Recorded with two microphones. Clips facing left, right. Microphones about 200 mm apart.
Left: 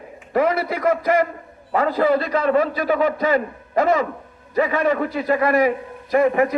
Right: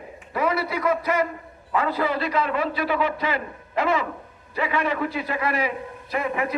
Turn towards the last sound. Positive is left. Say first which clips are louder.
# left 9 dB
turn(degrees=45)  # may be behind; listen again after turning